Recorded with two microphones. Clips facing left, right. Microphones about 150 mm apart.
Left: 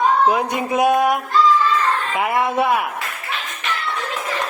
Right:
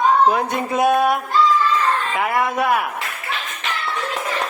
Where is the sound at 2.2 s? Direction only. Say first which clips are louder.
Left 2 dB; 25° left (ahead or behind).